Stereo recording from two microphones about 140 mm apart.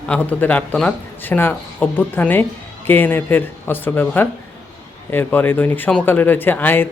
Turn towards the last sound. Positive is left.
turn(degrees=15)  # may be behind; listen again after turning